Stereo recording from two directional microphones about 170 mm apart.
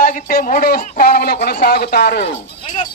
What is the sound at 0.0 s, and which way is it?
Speech, 50° left (ahead or behind).